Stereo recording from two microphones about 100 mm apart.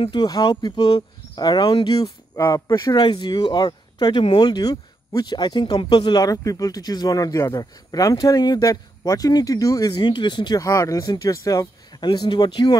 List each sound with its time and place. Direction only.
0.0 s speech: 55° left (ahead or behind)
10.6 s speech: 35° left (ahead or behind)
12.0 s speech: 45° left (ahead or behind)